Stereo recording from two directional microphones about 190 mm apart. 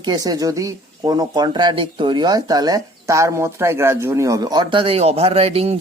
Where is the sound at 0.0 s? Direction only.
20° right (ahead or behind).